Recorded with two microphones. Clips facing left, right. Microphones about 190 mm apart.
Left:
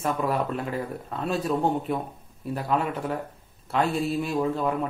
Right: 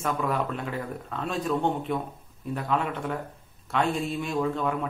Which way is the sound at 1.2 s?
5° left (ahead or behind).